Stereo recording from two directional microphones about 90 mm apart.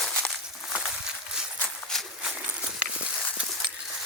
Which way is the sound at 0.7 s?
5° right (ahead or behind).